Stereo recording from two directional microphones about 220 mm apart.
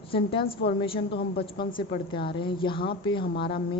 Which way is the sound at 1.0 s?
45° left (ahead or behind).